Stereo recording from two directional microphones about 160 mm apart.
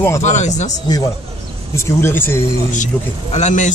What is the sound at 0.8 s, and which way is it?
Speech, 25° left (ahead or behind).